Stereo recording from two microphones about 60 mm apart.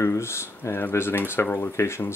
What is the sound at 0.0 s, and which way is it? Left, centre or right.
Speech, left.